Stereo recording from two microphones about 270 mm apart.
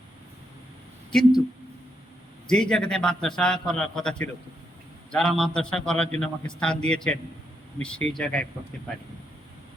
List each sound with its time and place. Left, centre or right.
2.5 s a man's voice: centre